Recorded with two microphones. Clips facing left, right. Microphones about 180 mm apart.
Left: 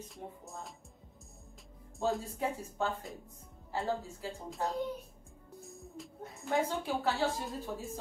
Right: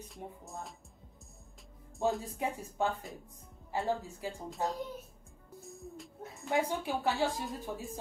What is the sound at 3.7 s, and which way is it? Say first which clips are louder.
Speech: right 1 dB; 15° right (ahead or behind).